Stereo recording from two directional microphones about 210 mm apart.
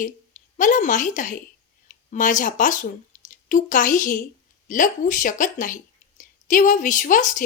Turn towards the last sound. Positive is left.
turn(degrees=40)  # may be behind; listen again after turning